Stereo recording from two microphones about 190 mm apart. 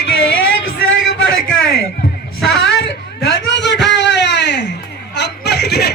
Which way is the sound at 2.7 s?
65° left (ahead or behind).